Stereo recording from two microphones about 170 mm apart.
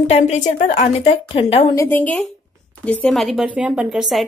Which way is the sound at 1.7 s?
15° left (ahead or behind).